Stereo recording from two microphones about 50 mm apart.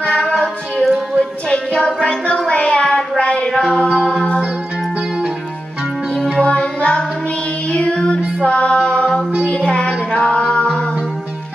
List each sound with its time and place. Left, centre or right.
0.8 s music: centre
1.5 s a sound: centre
2.4 s music: left
2.8 s child singing: centre
3.2 s a sound: left
4.1 s music: left
6.1 s music: centre
6.4 s child singing: left
7.7 s music: left
8.5 s a capella: left
9.5 s music: centre